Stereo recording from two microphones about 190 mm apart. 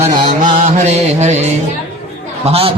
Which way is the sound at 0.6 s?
35° right (ahead or behind).